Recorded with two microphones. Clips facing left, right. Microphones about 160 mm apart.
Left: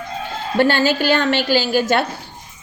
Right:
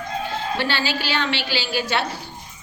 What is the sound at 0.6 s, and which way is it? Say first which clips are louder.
A woman's voice: left 13 dB; 50° left (ahead or behind).